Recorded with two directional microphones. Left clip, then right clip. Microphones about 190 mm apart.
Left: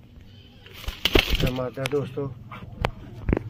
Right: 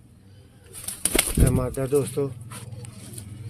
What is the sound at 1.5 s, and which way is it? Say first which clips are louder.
Speech: right 3 dB; 70° right (ahead or behind).